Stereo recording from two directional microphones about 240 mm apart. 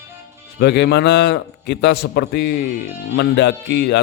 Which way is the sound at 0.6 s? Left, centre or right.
Left.